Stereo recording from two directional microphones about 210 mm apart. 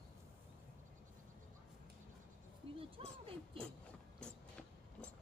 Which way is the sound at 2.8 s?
25° right (ahead or behind).